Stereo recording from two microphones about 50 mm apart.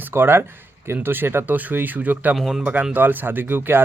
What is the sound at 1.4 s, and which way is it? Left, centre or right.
Speech, right.